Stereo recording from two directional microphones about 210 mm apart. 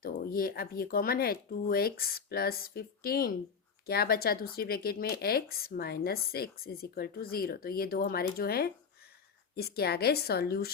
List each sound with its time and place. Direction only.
0.0 s speech: 45° left (ahead or behind)